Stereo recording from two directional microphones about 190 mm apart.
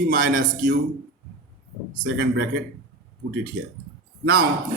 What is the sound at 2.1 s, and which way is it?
Speech, 60° right (ahead or behind).